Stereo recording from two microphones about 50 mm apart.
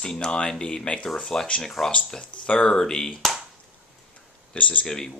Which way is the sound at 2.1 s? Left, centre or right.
Centre.